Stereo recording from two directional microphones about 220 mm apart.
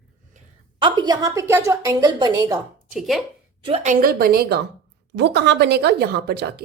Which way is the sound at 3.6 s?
30° right (ahead or behind).